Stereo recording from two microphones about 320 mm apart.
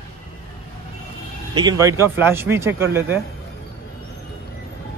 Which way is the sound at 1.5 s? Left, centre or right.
Centre.